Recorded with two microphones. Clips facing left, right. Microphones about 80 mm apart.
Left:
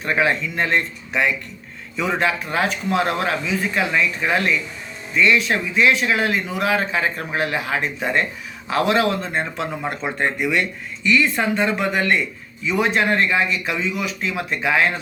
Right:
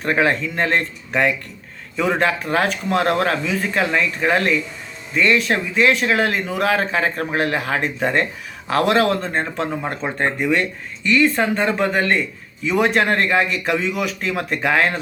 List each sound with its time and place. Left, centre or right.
0.0 s speech: right
12.6 s speech: right